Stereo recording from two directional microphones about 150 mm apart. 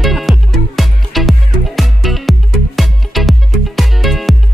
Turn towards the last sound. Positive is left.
turn(degrees=0)  # may be behind; listen again after turning